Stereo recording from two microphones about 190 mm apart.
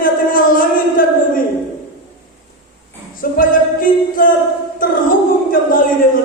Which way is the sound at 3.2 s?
45° left (ahead or behind).